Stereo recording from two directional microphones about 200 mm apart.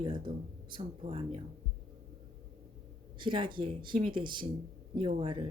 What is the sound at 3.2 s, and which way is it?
Speech, 25° right (ahead or behind).